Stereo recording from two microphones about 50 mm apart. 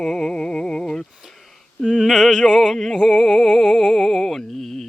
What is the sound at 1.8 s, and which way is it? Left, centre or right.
Music, centre.